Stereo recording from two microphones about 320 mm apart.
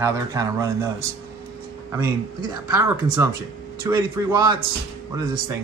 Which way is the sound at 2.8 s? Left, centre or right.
Centre.